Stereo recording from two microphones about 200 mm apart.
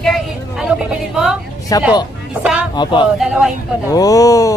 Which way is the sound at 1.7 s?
20° left (ahead or behind).